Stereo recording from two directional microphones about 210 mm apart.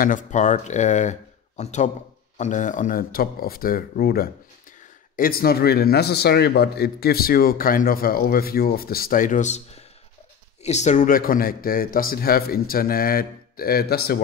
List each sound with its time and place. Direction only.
0.0 s a man's voice: 35° left (ahead or behind)
10.6 s a man's voice: 35° left (ahead or behind)